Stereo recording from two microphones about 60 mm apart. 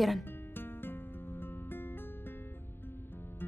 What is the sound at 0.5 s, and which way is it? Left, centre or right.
Music, left.